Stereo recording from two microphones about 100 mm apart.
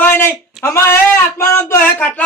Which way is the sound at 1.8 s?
15° left (ahead or behind).